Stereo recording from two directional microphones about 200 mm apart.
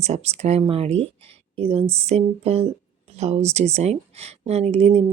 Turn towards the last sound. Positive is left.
turn(degrees=-30)  # may be behind; listen again after turning